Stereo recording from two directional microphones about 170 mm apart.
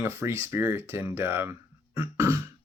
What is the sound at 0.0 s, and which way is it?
Speech, 15° right (ahead or behind).